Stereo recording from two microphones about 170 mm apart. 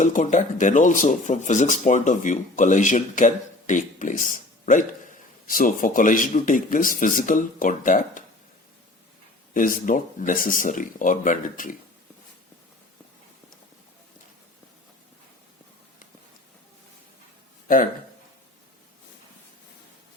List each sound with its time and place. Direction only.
0.0 s speech: 45° left (ahead or behind)
9.6 s speech: 50° left (ahead or behind)
17.7 s speech: 55° left (ahead or behind)